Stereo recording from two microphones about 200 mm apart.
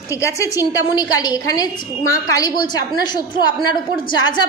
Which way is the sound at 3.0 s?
20° left (ahead or behind).